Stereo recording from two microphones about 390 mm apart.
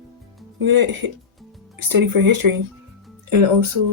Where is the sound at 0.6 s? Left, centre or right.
Right.